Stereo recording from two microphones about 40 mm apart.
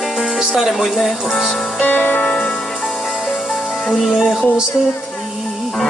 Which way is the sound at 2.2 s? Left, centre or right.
Left.